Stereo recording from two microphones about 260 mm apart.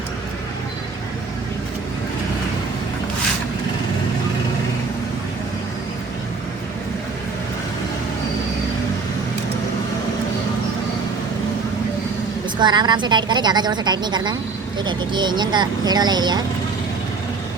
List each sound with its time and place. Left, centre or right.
12.5 s a woman's voice: centre